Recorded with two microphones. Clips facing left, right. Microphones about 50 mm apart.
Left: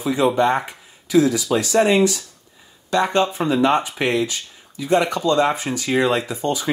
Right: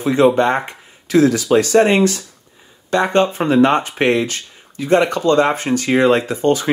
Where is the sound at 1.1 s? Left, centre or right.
Right.